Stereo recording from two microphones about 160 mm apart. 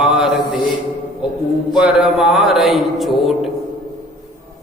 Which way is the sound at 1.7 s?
5° right (ahead or behind).